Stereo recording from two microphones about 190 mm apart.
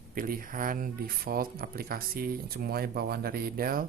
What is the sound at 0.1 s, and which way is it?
Speech, 50° right (ahead or behind).